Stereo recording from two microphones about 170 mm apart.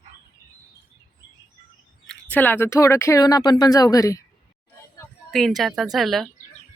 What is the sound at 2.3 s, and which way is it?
Speech, 10° left (ahead or behind).